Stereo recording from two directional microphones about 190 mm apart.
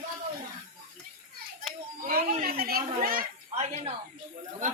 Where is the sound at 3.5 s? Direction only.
35° right (ahead or behind).